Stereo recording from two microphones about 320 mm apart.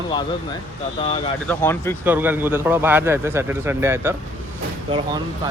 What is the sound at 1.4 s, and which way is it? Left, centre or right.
Speech, centre.